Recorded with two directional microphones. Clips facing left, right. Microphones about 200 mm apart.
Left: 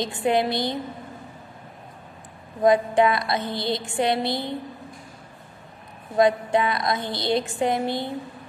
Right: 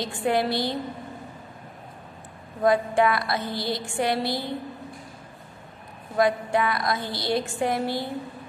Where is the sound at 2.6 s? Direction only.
20° left (ahead or behind).